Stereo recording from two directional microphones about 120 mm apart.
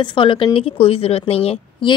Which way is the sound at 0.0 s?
40° left (ahead or behind).